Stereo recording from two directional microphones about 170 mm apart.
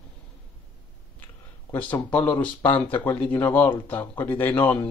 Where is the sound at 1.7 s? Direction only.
10° left (ahead or behind).